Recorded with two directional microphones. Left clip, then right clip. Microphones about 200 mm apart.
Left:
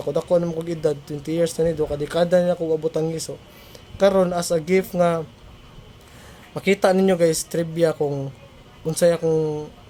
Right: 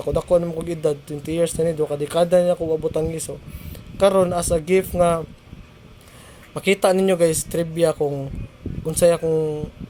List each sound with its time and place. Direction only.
0.0 s speech: 5° left (ahead or behind)
6.5 s speech: 5° left (ahead or behind)